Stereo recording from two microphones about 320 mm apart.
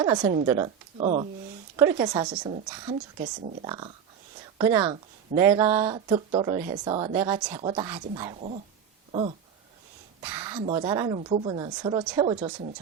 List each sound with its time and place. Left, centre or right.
0.0 s speech: centre
2.9 s speech: right
10.2 s speech: centre